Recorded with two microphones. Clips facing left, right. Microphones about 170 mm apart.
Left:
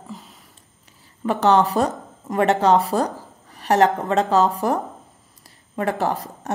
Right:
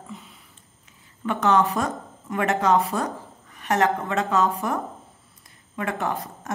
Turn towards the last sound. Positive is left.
turn(degrees=35)  # may be behind; listen again after turning